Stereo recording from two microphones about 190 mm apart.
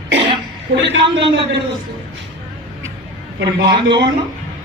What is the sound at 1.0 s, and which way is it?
Speech, 25° right (ahead or behind).